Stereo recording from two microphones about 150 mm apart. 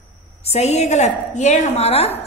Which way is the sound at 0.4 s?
45° left (ahead or behind).